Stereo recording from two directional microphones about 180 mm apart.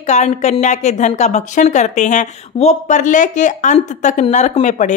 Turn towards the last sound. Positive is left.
turn(degrees=40)  # may be behind; listen again after turning